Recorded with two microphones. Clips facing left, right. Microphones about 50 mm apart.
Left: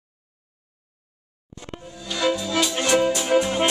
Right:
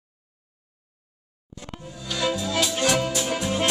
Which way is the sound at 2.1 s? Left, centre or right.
Centre.